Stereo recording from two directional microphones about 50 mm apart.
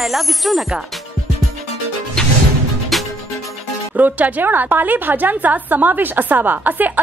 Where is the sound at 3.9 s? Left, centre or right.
Right.